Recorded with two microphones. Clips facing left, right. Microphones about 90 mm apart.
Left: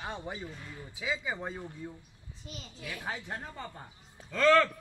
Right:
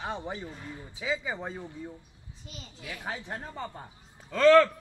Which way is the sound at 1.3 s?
Centre (ahead or behind).